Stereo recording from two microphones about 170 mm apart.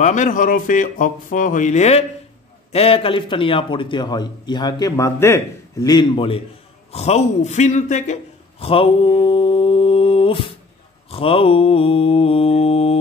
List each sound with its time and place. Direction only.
0.0 s a man's voice: 45° left (ahead or behind); by 10.4 s 30° left (ahead or behind)
11.1 s mantra: 35° left (ahead or behind)